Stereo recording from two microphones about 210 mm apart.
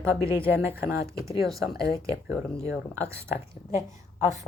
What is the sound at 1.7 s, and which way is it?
Speech, 45° left (ahead or behind).